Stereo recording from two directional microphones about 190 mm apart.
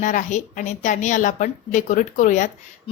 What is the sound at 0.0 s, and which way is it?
A woman's voice, 40° left (ahead or behind).